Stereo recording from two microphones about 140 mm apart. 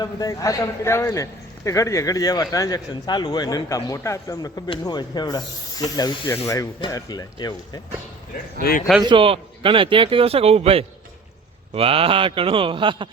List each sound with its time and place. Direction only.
0.0 s a man's voice: 25° left (ahead or behind)
8.6 s speech: 90° left
9.0 s a man's voice: 40° right (ahead or behind)